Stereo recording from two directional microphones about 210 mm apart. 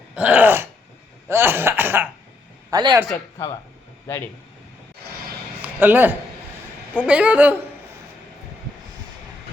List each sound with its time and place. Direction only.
0.2 s cough: 5° right (ahead or behind)
2.6 s speech: 20° right (ahead or behind)
3.1 s speech: 15° left (ahead or behind)
5.6 s a man's voice: 10° right (ahead or behind)
7.0 s cough: 5° right (ahead or behind)